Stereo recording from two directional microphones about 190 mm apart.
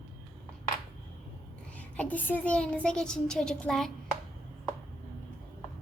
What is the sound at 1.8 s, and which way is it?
A child's voice, 5° left (ahead or behind).